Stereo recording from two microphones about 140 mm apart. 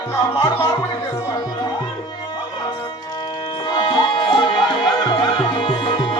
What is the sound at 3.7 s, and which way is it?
Music, 35° left (ahead or behind).